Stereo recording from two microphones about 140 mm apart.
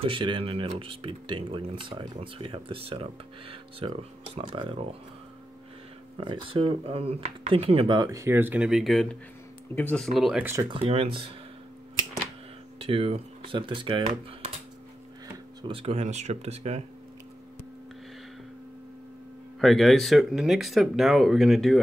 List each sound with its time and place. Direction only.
0.0 s speech: 35° right (ahead or behind)
6.1 s speech: 35° right (ahead or behind); by 9.2 s centre (ahead or behind)
9.8 s speech: 10° left (ahead or behind)
10.1 s speech: centre (ahead or behind)
10.4 s speech: 20° right (ahead or behind)
10.9 s speech: 45° right (ahead or behind)
12.7 s speech: 45° right (ahead or behind)
15.6 s speech: 40° right (ahead or behind)
19.6 s speech: centre (ahead or behind)